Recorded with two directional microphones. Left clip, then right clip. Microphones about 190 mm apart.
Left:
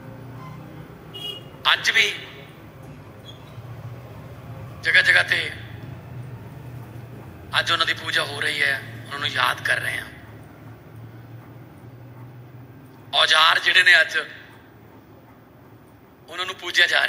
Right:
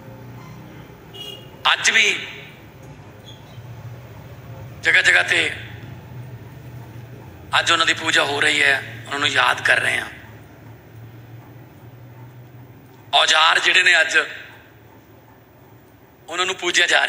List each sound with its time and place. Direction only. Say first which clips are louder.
1.6 s a man's voice: right 3 dB; 15° left (ahead or behind)
4.8 s a man's voice: right 2 dB; 15° left (ahead or behind)
7.4 s a man's voice: right 4 dB; 15° left (ahead or behind)
13.1 s a man's voice: right 2 dB; 15° left (ahead or behind)
16.3 s a man's voice: right 7 dB; 15° left (ahead or behind)